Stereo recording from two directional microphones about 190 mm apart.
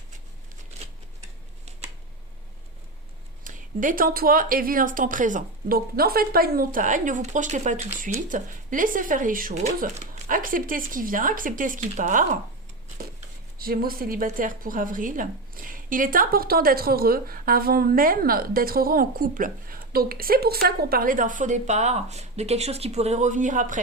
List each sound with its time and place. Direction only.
0.7 s a sound: 35° right (ahead or behind)
3.4 s a woman's voice: 45° right (ahead or behind)
13.6 s a woman's voice: 50° right (ahead or behind)